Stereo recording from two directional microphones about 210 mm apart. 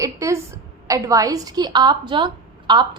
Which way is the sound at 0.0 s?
15° right (ahead or behind).